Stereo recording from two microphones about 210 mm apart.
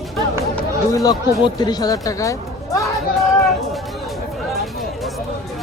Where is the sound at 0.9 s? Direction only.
15° left (ahead or behind).